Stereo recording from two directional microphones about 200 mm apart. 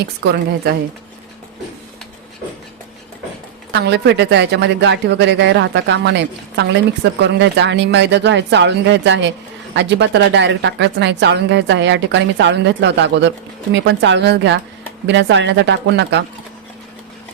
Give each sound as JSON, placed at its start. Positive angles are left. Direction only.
{"t": 0.0, "sound": "a woman's voice", "side_deg": -55}
{"t": 3.7, "sound": "a woman's voice", "side_deg": -55}